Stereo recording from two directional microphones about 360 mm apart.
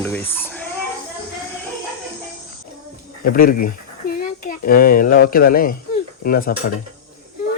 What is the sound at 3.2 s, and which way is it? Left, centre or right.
Speech, left.